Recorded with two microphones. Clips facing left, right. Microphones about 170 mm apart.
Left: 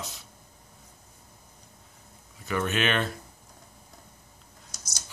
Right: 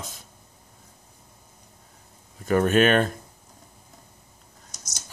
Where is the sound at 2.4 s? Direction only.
45° right (ahead or behind).